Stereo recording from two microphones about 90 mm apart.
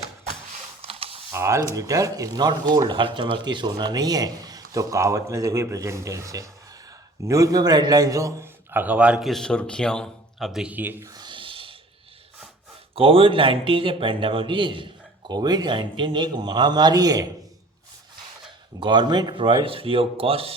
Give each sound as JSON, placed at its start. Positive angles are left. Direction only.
{"t": 0.8, "sound": "computer keyboard", "side_deg": -90}
{"t": 1.3, "sound": "a man's voice", "side_deg": -30}
{"t": 8.7, "sound": "a man's voice", "side_deg": -20}
{"t": 9.2, "sound": "speech", "side_deg": 5}
{"t": 10.6, "sound": "speech", "side_deg": -20}
{"t": 11.0, "sound": "a sound", "side_deg": -50}
{"t": 13.0, "sound": "a man's voice", "side_deg": -90}
{"t": 18.8, "sound": "a man's voice", "side_deg": -55}
{"t": 19.4, "sound": "speech", "side_deg": -70}